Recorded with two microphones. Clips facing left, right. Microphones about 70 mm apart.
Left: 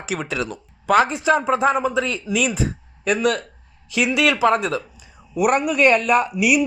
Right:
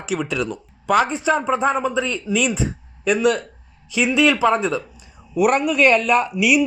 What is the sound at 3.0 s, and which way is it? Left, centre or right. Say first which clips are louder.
Speech: right 2 dB; left.